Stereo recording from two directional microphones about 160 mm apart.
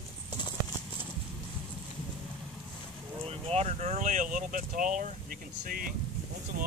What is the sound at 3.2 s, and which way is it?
Speech, 40° right (ahead or behind).